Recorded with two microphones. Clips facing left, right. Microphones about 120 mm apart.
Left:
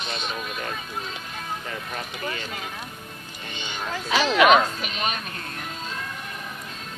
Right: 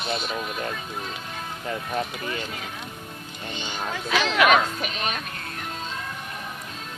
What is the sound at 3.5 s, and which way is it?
Music, 15° left (ahead or behind).